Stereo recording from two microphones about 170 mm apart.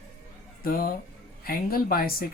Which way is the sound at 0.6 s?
55° left (ahead or behind).